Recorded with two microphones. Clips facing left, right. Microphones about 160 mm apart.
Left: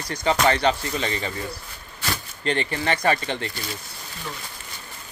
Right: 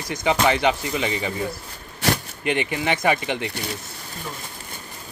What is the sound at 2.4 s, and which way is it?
Speech, 15° right (ahead or behind).